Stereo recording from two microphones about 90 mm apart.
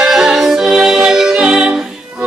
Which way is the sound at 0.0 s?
5° right (ahead or behind).